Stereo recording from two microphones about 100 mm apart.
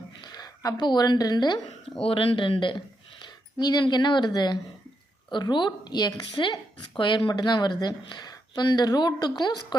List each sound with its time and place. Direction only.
0.2 s a sound: 40° left (ahead or behind)
0.8 s speech: 45° left (ahead or behind)
2.0 s speech: 65° left (ahead or behind); by 6.2 s 40° left (ahead or behind)
6.3 s speech: 55° left (ahead or behind)